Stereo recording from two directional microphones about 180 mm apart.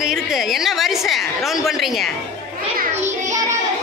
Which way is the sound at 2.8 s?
40° right (ahead or behind).